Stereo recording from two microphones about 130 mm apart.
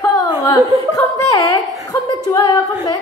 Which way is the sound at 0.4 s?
25° left (ahead or behind).